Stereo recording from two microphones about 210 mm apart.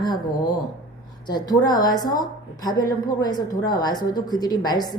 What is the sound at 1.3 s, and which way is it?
A woman's voice, 20° left (ahead or behind).